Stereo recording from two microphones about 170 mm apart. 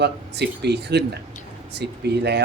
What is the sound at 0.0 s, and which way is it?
A man's voice, 80° right.